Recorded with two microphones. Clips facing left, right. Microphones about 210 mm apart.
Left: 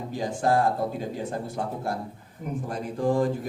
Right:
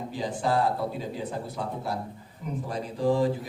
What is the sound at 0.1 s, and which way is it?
A man's voice, 50° left (ahead or behind).